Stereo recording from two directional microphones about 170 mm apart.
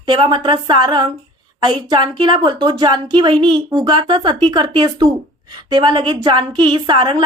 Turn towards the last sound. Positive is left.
turn(degrees=-30)  # may be behind; listen again after turning